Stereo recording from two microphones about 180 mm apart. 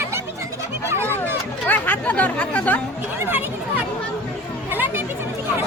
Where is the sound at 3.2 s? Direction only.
10° right (ahead or behind).